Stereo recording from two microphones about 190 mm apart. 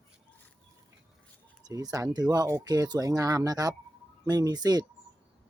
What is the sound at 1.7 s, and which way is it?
Speech, 20° right (ahead or behind).